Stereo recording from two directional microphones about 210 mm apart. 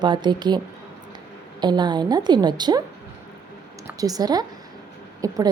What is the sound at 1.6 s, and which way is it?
A woman's voice, 20° right (ahead or behind).